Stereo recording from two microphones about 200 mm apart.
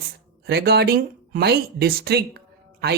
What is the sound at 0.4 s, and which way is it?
Speech, 55° right (ahead or behind).